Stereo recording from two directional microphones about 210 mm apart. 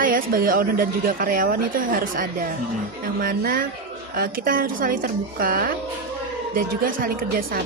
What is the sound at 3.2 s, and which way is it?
Speech, 40° right (ahead or behind).